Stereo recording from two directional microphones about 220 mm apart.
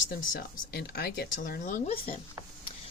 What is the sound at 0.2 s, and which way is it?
Speech, 45° left (ahead or behind).